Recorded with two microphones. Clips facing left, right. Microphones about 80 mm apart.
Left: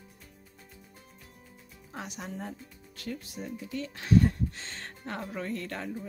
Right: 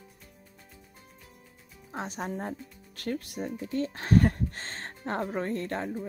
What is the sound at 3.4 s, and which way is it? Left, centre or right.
Speech, right.